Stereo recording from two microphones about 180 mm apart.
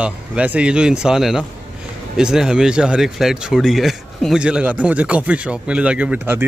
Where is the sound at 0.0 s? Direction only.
5° right (ahead or behind).